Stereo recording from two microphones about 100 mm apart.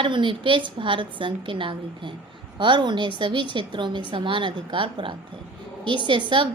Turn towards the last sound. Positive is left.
turn(degrees=-55)  # may be behind; listen again after turning